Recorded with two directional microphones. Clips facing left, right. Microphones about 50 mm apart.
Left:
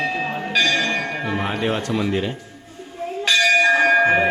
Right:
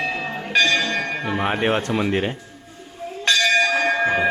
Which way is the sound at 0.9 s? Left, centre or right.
Centre.